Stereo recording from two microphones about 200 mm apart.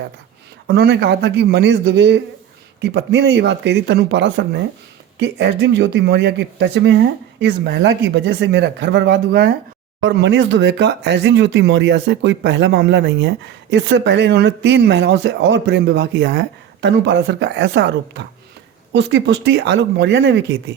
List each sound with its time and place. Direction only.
0.7 s speech: 55° right (ahead or behind)